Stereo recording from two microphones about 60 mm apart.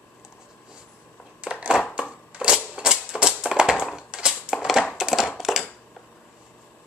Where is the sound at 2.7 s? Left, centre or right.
Centre.